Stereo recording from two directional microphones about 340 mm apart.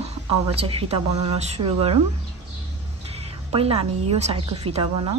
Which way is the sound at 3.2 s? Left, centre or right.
Centre.